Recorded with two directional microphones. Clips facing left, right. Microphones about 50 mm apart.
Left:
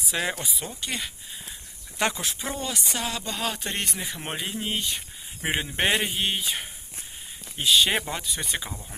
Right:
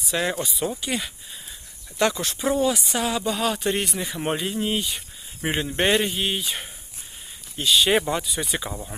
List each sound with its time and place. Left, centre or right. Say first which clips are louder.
0.0 s speech: right 3 dB; centre
2.0 s speech: right 4 dB; centre
2.2 s speech: right 9 dB; centre
5.4 s speech: right 2 dB; centre
8.7 s speech: right 6 dB; right